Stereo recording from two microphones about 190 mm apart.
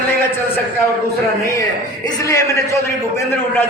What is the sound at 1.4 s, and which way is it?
A man's voice, 20° left (ahead or behind).